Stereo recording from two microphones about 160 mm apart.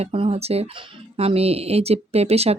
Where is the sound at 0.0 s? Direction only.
40° right (ahead or behind).